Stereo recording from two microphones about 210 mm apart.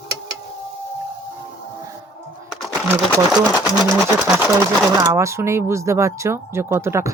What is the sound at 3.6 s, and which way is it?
Speech, 20° left (ahead or behind).